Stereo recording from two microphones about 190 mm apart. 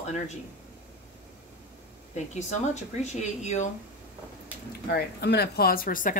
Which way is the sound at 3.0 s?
35° left (ahead or behind).